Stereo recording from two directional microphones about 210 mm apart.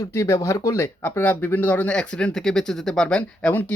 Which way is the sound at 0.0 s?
15° left (ahead or behind).